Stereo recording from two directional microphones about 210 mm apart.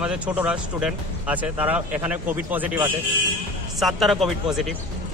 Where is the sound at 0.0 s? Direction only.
5° right (ahead or behind).